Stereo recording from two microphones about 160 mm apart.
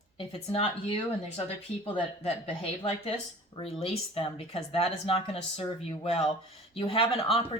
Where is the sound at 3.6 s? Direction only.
35° left (ahead or behind).